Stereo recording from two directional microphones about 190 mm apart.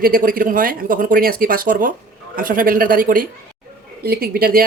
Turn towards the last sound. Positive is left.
turn(degrees=-50)  # may be behind; listen again after turning